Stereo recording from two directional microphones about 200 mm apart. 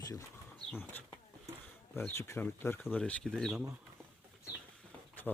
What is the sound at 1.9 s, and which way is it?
Speech, 10° left (ahead or behind).